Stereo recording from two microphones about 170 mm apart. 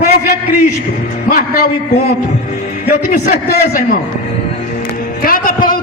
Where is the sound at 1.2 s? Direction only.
55° left (ahead or behind).